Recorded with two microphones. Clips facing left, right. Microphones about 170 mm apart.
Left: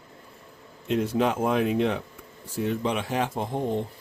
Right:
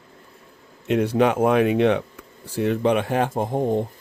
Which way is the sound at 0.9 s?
70° right (ahead or behind).